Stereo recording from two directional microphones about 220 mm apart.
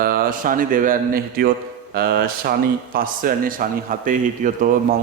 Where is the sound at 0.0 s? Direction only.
40° right (ahead or behind).